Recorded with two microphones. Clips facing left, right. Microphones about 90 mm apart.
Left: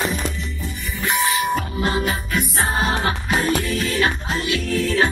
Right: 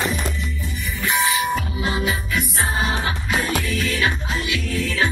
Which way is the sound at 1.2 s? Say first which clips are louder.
Left 2 dB; 45° left (ahead or behind).